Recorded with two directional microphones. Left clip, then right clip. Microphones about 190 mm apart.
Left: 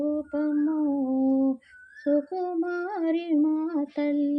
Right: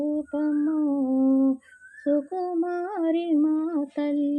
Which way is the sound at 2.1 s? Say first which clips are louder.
Even; 20° right (ahead or behind).